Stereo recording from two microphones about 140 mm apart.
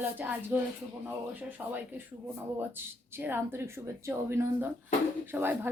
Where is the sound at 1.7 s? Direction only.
15° right (ahead or behind).